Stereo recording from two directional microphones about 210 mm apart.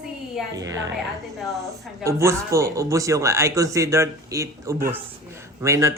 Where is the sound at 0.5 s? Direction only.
15° right (ahead or behind).